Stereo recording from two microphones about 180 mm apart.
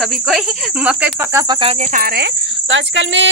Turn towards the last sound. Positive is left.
turn(degrees=-90)